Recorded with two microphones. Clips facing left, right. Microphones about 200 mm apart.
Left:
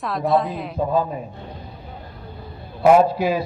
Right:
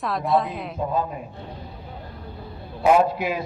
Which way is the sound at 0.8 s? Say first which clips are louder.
Left 5 dB; 35° left (ahead or behind).